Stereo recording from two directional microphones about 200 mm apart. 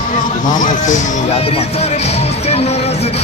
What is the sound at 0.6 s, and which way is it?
Speech, 40° left (ahead or behind).